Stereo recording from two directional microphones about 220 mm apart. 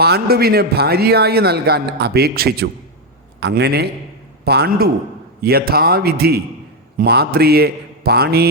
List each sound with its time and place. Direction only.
0.0 s a man's voice: 45° right (ahead or behind)